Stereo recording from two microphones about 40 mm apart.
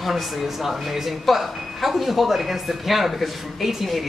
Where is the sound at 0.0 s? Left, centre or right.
Centre.